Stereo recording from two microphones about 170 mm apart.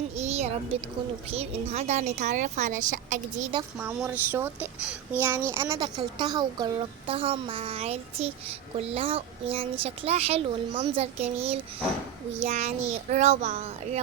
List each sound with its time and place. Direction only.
0.2 s a woman's voice: 40° right (ahead or behind)
3.8 s speech: 5° right (ahead or behind)
5.7 s a child's voice: 25° right (ahead or behind)